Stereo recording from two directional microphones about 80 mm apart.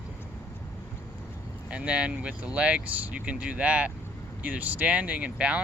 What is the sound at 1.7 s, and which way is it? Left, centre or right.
Speech, centre.